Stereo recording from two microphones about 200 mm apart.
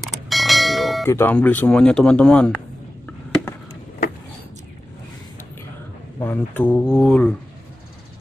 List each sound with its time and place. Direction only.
0.0 s bell: centre (ahead or behind)
1.0 s speech: 10° left (ahead or behind)
6.1 s speech: 10° left (ahead or behind)